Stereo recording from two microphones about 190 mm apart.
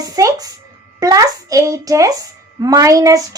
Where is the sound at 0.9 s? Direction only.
20° right (ahead or behind).